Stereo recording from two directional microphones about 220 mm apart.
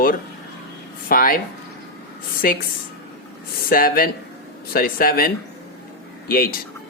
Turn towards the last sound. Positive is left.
turn(degrees=40)  # may be behind; listen again after turning